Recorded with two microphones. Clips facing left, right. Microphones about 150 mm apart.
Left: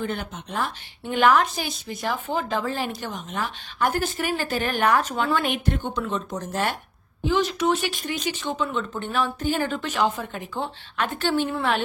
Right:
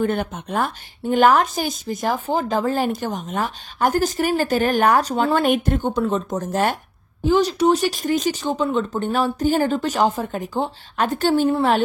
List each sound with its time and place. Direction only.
0.0 s speech: 50° right (ahead or behind)